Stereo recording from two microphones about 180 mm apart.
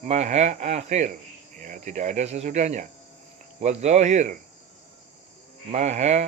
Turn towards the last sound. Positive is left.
turn(degrees=-40)  # may be behind; listen again after turning